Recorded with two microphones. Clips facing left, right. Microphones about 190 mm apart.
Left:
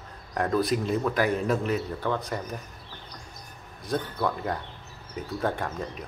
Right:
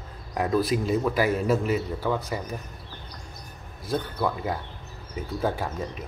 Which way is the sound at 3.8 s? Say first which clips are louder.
Right 1 dB; centre (ahead or behind).